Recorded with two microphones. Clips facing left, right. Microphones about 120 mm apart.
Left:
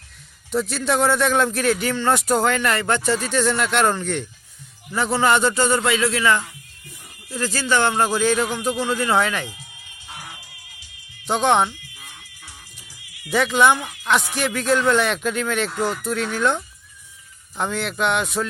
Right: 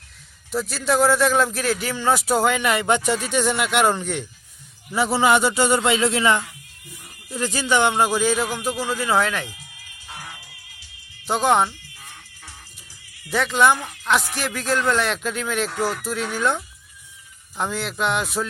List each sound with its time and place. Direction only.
0.5 s speech: centre (ahead or behind)
9.5 s music: 25° left (ahead or behind)
11.3 s speech: 5° right (ahead or behind)
13.3 s speech: centre (ahead or behind)